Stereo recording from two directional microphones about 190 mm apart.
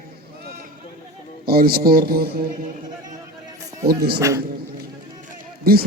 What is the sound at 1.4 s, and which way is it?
Speech, 55° right (ahead or behind).